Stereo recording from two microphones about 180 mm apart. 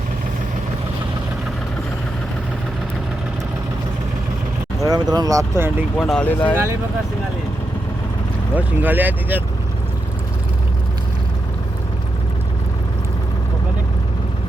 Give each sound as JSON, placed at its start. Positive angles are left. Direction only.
{"t": 4.8, "sound": "speech", "side_deg": -20}
{"t": 6.0, "sound": "speech", "side_deg": 5}
{"t": 8.5, "sound": "speech", "side_deg": -10}